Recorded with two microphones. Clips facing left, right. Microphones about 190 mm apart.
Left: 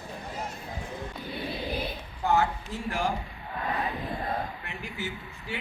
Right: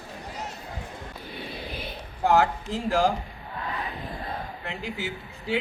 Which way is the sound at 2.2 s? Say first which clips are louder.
Right 4 dB; 90° right.